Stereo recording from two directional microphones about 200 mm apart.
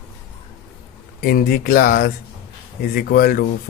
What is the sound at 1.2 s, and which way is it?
Speech, 45° left (ahead or behind).